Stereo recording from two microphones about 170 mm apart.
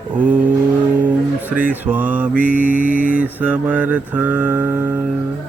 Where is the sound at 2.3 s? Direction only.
50° right (ahead or behind).